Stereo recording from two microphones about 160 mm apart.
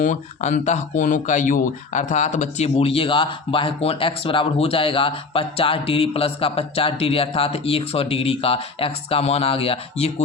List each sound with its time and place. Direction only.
0.0 s speech: 50° left (ahead or behind)